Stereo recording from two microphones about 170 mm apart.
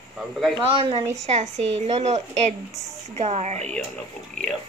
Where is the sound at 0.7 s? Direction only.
35° right (ahead or behind).